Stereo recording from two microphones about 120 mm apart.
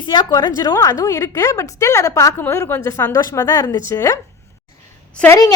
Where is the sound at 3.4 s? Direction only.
20° left (ahead or behind).